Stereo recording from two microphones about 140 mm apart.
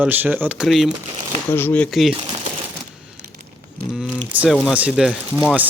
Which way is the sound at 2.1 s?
35° right (ahead or behind).